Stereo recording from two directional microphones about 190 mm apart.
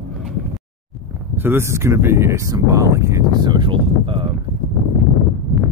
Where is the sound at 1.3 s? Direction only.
10° right (ahead or behind).